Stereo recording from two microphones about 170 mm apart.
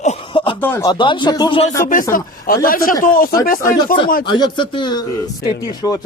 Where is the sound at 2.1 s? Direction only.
60° left (ahead or behind).